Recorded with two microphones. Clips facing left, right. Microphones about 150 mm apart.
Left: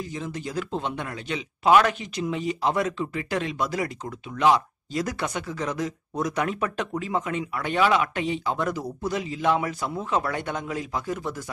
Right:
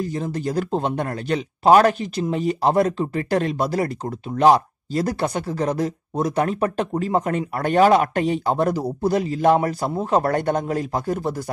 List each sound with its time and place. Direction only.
0.0 s speech: 40° right (ahead or behind)